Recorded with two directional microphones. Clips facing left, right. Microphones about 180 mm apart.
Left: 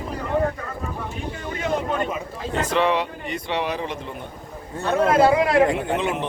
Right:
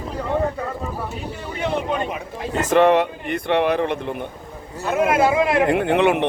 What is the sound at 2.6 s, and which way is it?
Speech, 50° right (ahead or behind).